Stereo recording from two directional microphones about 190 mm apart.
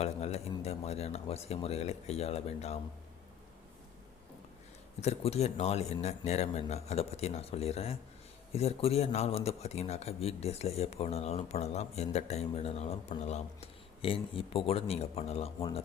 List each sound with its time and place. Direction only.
0.0 s speech: 35° left (ahead or behind)
4.9 s speech: 35° left (ahead or behind)